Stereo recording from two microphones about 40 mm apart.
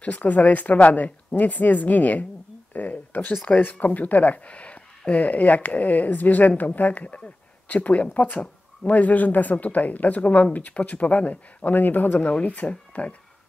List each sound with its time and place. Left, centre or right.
0.0 s speech: left
12.4 s speech: left